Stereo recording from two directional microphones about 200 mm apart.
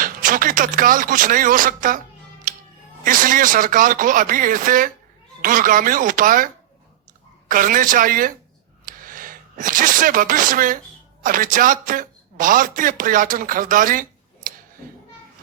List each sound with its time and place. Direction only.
0.0 s speech: 45° right (ahead or behind)
3.0 s speech: 40° right (ahead or behind)
8.9 s a sound: 45° right (ahead or behind)
11.2 s speech: 45° right (ahead or behind)